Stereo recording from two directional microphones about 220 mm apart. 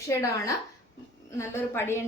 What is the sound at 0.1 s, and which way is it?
A woman's voice, 15° left (ahead or behind).